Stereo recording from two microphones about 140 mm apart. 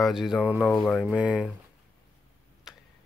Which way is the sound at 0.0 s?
Centre (ahead or behind).